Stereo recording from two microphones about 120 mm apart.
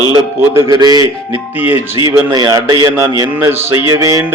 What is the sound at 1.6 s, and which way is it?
Speech, 15° right (ahead or behind).